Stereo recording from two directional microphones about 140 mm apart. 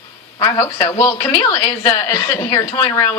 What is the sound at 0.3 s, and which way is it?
Speech, 30° left (ahead or behind).